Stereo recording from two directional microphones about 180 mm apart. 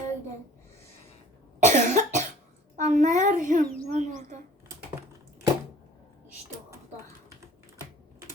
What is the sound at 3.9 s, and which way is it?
Bird, 40° right (ahead or behind).